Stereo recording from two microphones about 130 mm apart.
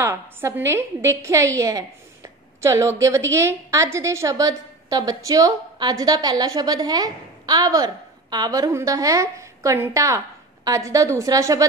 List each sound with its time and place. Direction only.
0.0 s a woman's voice: 20° right (ahead or behind)